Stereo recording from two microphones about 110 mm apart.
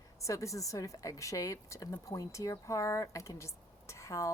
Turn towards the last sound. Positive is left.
turn(degrees=25)  # may be behind; listen again after turning